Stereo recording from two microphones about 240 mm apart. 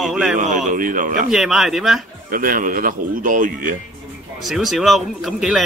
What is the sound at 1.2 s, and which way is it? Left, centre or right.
Speech, centre.